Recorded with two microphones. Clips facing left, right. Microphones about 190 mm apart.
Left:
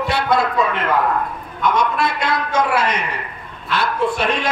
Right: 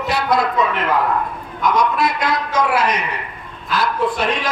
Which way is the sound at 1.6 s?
25° left (ahead or behind).